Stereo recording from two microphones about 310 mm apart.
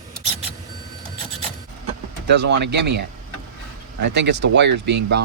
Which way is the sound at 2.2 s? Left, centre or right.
Right.